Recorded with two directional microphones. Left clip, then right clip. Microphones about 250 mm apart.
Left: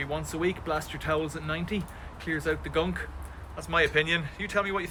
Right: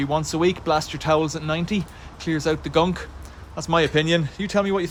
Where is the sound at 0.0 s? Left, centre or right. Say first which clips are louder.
Right 9 dB; centre.